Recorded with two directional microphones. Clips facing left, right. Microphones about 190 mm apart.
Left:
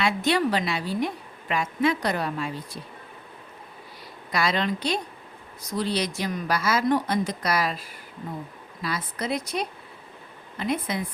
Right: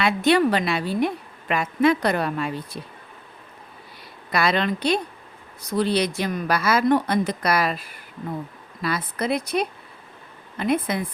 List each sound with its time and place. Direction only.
0.0 s a woman's voice: 60° right (ahead or behind)
4.3 s a woman's voice: 60° right (ahead or behind)